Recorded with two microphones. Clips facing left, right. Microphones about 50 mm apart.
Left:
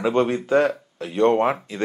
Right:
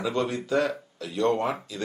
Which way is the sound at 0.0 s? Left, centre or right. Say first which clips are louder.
Left 7 dB; left.